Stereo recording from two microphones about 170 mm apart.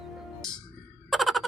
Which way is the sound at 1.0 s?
Centre (ahead or behind).